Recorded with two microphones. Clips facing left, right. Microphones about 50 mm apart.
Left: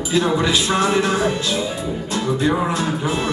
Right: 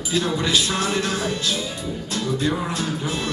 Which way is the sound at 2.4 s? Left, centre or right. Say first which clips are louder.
Left 6 dB; left.